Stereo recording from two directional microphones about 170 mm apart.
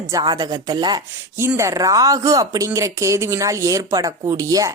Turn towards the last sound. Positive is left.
turn(degrees=-20)  # may be behind; listen again after turning